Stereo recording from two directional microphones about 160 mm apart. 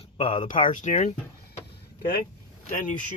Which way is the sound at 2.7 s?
55° left (ahead or behind).